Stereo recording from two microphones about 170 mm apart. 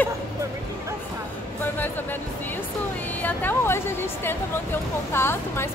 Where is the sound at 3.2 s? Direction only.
15° left (ahead or behind).